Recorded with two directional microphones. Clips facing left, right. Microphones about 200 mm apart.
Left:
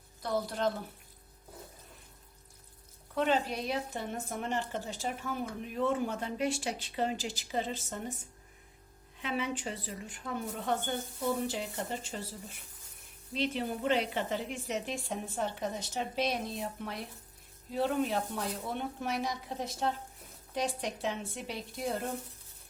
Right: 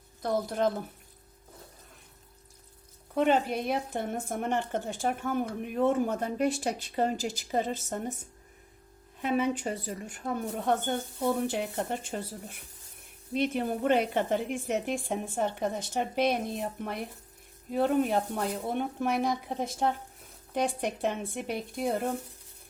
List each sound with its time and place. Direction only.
0.2 s speech: 50° right (ahead or behind)
3.2 s speech: 55° right (ahead or behind)
9.2 s speech: 50° right (ahead or behind)